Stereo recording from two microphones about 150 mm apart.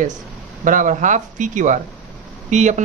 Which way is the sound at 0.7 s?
60° right (ahead or behind).